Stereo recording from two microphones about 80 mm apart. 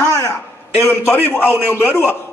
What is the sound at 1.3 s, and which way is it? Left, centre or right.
Speech, left.